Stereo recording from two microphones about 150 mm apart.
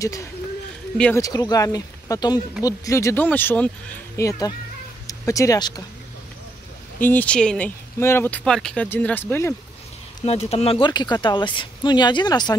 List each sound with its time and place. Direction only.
0.0 s speech: 20° left (ahead or behind)
4.2 s speech: 25° left (ahead or behind)
7.0 s speech: 10° left (ahead or behind)
10.2 s speech: 45° left (ahead or behind)
10.9 s speech: 30° left (ahead or behind)